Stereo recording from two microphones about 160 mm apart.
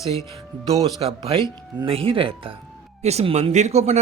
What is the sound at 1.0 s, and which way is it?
Speech, 35° right (ahead or behind).